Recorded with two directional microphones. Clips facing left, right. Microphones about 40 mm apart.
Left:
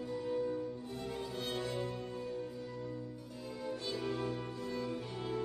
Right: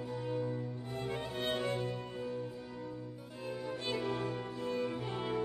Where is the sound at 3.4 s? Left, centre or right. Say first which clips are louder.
Right 2 dB; right.